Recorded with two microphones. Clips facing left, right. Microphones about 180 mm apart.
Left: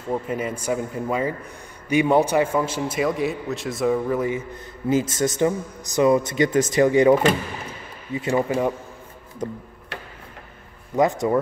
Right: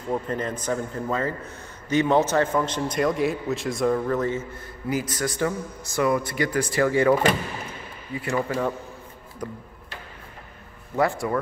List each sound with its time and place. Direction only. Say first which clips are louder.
0.0 s a man's voice: left 1 dB; 10° left (ahead or behind)
4.8 s a man's voice: left 6 dB; 25° left (ahead or behind)
11.0 s a man's voice: left 4 dB; 20° left (ahead or behind)